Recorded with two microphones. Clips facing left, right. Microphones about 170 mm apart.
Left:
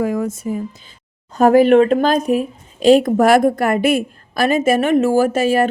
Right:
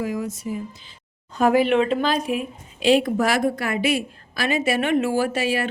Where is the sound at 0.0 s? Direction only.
55° left (ahead or behind).